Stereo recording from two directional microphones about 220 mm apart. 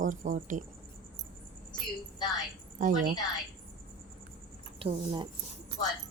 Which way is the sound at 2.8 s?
35° right (ahead or behind).